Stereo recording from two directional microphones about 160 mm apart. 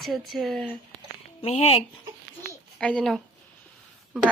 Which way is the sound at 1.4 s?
40° left (ahead or behind).